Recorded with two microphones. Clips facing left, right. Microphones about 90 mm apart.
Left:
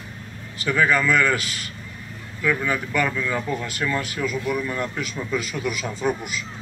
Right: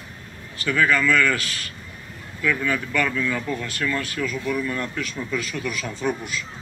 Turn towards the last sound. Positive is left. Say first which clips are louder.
# left 1 dB
turn(degrees=10)  # may be behind; listen again after turning